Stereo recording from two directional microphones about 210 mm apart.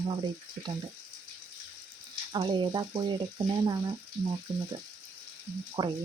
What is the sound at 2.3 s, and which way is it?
Frying, 20° right (ahead or behind).